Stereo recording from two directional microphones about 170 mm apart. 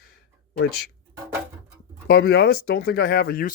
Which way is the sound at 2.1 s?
70° left (ahead or behind).